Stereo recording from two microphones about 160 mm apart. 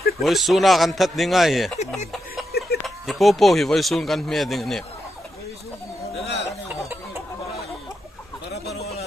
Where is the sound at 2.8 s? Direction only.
Centre (ahead or behind).